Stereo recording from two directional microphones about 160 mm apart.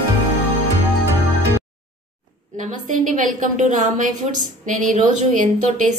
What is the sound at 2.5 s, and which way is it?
A woman's voice, 55° right (ahead or behind).